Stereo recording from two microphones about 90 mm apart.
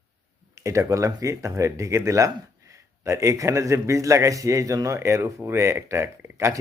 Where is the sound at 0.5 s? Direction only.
35° right (ahead or behind).